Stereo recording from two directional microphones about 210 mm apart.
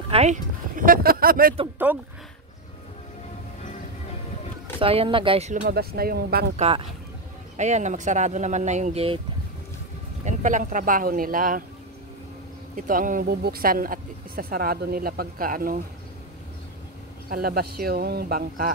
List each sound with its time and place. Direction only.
0.1 s a sound: 35° right (ahead or behind)
1.9 s speech: 10° right (ahead or behind)
4.7 s speech: 25° right (ahead or behind); by 6.5 s 50° right (ahead or behind)
6.5 s speech: 30° right (ahead or behind)
10.2 s speech: 35° right (ahead or behind)
12.7 s speech: 40° right (ahead or behind)
17.3 s speech: 45° right (ahead or behind)